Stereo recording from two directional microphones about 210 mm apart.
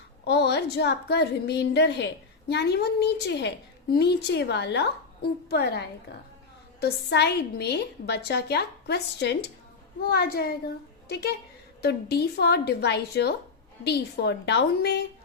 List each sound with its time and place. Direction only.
0.3 s a woman's voice: 50° left (ahead or behind)